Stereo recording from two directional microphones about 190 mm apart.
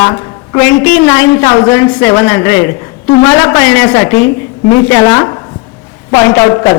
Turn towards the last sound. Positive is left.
turn(degrees=20)  # may be behind; listen again after turning